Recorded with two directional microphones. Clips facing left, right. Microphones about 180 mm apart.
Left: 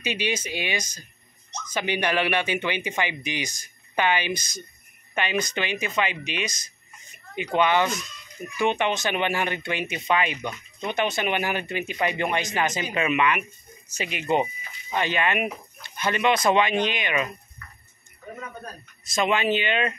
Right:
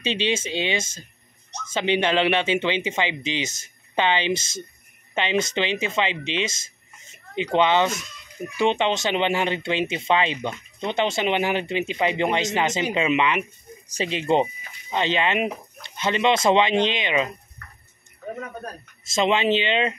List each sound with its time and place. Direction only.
0.0 s speech: 25° right (ahead or behind)
19.0 s speech: 25° right (ahead or behind)